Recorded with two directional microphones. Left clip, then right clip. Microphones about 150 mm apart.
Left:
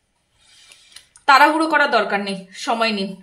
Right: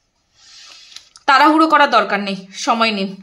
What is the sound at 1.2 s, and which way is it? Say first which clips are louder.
A woman's voice: right 2 dB; 25° right (ahead or behind).